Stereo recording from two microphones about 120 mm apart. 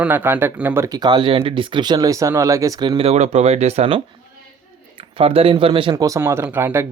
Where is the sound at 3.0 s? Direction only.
60° right (ahead or behind).